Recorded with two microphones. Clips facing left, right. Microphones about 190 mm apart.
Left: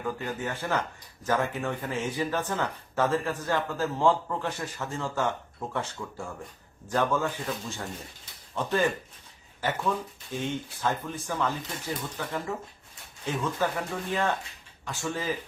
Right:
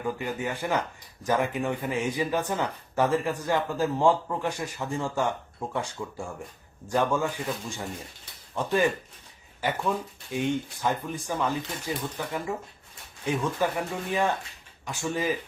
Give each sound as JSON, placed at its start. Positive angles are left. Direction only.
{"t": 0.0, "sound": "speech", "side_deg": -15}